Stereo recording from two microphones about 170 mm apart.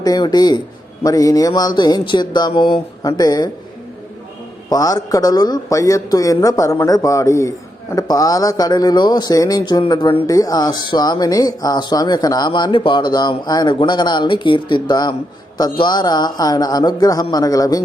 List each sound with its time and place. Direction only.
0.0 s speech: 25° left (ahead or behind)
4.7 s speech: 20° left (ahead or behind)